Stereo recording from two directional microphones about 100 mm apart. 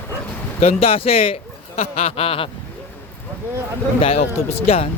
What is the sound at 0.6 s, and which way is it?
A man's voice, 80° left.